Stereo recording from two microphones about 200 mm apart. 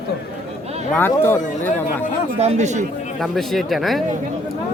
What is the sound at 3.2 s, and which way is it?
Speech, centre (ahead or behind).